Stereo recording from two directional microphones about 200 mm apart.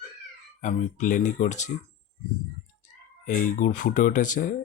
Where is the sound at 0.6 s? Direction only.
35° left (ahead or behind).